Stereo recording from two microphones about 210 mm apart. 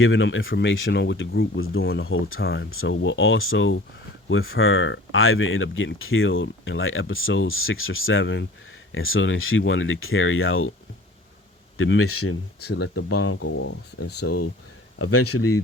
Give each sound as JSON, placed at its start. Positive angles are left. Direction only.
{"t": 0.0, "sound": "speech", "side_deg": 65}
{"t": 1.5, "sound": "speech", "side_deg": 75}
{"t": 8.9, "sound": "speech", "side_deg": 70}
{"t": 11.8, "sound": "speech", "side_deg": 75}
{"t": 12.5, "sound": "speech", "side_deg": 50}
{"t": 13.1, "sound": "speech", "side_deg": 90}
{"t": 14.2, "sound": "speech", "side_deg": 70}
{"t": 14.9, "sound": "speech", "side_deg": 90}